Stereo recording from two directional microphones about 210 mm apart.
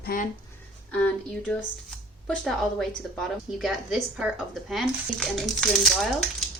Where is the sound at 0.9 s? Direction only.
5° left (ahead or behind).